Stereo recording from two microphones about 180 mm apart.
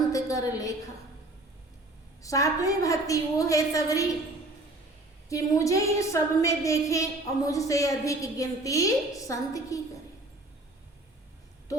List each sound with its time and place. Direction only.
0.1 s a sound: 20° left (ahead or behind)
2.2 s a woman's voice: 20° left (ahead or behind)
5.3 s a woman's voice: 15° left (ahead or behind)